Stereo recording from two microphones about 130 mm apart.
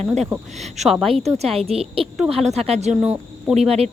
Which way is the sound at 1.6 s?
50° right (ahead or behind).